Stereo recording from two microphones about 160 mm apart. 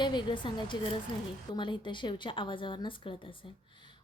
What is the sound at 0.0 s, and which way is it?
Speech, 30° left (ahead or behind).